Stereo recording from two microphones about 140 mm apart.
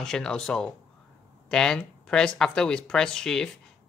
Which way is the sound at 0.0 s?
5° left (ahead or behind).